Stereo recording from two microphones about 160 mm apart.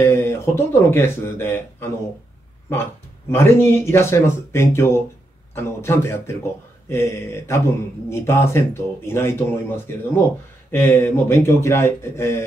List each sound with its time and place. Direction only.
0.0 s speech: 15° left (ahead or behind)